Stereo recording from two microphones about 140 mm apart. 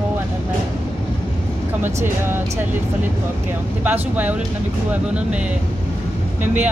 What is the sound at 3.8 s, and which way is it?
Speech, 10° right (ahead or behind).